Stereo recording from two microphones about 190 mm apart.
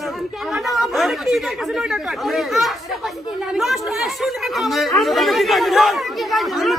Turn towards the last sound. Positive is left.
turn(degrees=0)  # may be behind; listen again after turning